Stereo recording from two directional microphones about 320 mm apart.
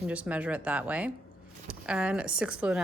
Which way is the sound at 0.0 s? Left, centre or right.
Centre.